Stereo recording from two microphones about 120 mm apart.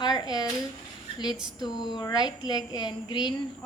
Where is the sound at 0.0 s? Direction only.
35° left (ahead or behind).